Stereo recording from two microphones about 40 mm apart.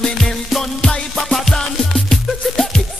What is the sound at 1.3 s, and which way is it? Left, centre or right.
Music, centre.